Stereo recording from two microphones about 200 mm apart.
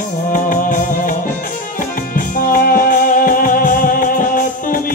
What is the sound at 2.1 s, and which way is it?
Music, 45° left (ahead or behind).